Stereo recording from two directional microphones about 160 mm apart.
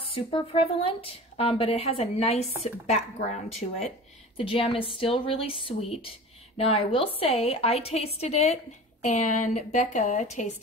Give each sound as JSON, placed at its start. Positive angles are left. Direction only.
{"t": 0.1, "sound": "a woman's voice", "side_deg": 35}
{"t": 4.4, "sound": "a woman's voice", "side_deg": 35}